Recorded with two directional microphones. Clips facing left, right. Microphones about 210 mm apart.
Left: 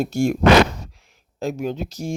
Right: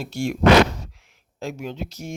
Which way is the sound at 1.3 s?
40° left (ahead or behind).